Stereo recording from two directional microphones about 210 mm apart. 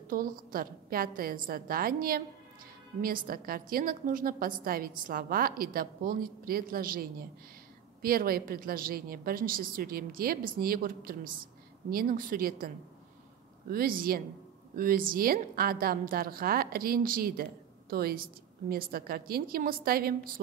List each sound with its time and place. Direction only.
0.1 s a woman's voice: 45° right (ahead or behind)